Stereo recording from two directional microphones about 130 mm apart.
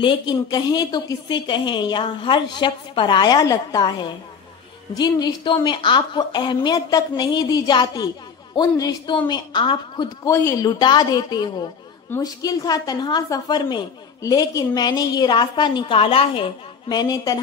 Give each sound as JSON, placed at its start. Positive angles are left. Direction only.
{"t": 0.0, "sound": "a woman's voice", "side_deg": 35}
{"t": 10.2, "sound": "speech", "side_deg": 20}
{"t": 10.8, "sound": "a woman's voice", "side_deg": 30}
{"t": 16.9, "sound": "speech", "side_deg": 30}